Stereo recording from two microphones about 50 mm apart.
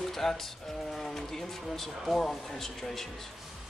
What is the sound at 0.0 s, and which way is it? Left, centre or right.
Music, centre.